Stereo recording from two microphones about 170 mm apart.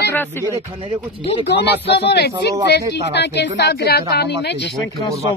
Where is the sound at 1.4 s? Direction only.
80° left.